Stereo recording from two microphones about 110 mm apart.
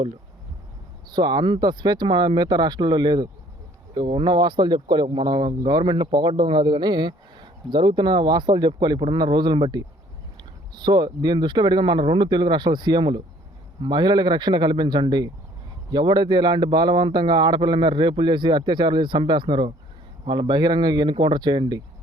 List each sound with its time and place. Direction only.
1.1 s a man's voice: 40° right (ahead or behind)